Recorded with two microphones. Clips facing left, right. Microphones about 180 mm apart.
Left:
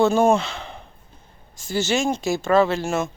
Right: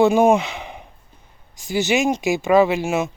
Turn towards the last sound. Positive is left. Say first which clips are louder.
# right 3 dB
turn(degrees=-10)  # may be behind; listen again after turning